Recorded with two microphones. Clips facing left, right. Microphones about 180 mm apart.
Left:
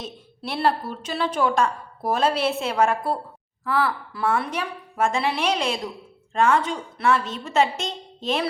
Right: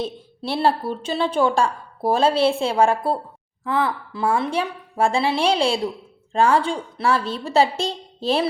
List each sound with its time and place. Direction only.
0.0 s a woman's voice: 30° right (ahead or behind)